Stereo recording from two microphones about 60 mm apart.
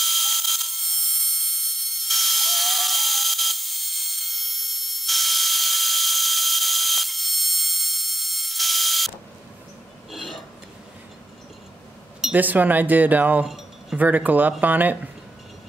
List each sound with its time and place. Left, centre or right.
0.0 s a sound: centre
10.1 s burping: centre
12.3 s speech: right